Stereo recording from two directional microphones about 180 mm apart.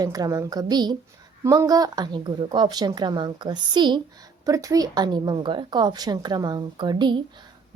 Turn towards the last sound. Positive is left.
turn(degrees=-25)  # may be behind; listen again after turning